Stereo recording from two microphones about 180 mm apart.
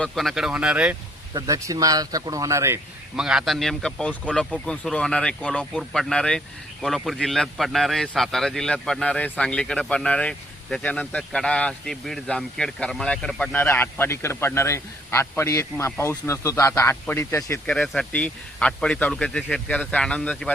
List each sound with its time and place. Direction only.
0.0 s speech: centre (ahead or behind)
1.3 s speech: 20° right (ahead or behind)
3.2 s speech: 5° right (ahead or behind); by 17.6 s 15° left (ahead or behind)
17.7 s speech: 5° left (ahead or behind)